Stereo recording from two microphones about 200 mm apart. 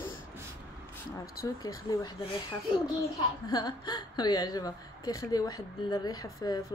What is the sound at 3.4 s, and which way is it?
A woman's voice, 20° left (ahead or behind).